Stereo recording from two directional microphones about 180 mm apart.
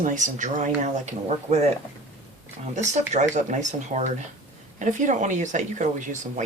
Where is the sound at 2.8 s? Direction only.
40° right (ahead or behind).